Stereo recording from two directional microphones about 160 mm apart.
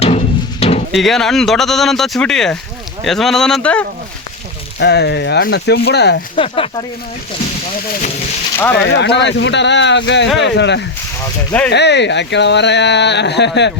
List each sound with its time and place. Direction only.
0.0 s music: 40° left (ahead or behind)
0.9 s speech: centre (ahead or behind)
4.8 s speech: 90° left
6.3 s speech: 35° left (ahead or behind)
8.5 s speech: 10° left (ahead or behind)
8.9 s speech: 90° left